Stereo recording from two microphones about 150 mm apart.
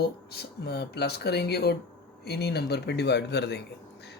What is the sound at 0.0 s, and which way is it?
Speech, 90° left.